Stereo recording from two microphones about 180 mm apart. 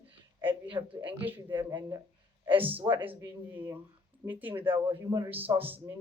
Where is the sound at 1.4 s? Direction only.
25° right (ahead or behind).